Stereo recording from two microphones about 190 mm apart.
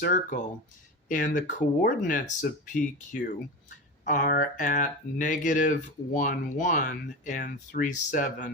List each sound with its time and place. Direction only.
0.0 s speech: 45° left (ahead or behind)